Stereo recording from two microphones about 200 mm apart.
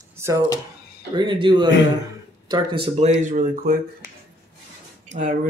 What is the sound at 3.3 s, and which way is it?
Speech, 40° right (ahead or behind).